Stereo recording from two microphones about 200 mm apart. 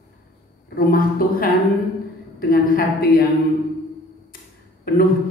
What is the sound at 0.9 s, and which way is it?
Speech, 45° left (ahead or behind).